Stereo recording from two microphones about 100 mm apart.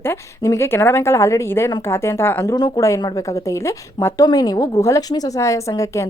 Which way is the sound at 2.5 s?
40° left (ahead or behind).